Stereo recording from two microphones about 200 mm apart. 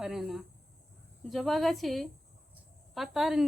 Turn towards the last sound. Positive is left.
turn(degrees=0)  # may be behind; listen again after turning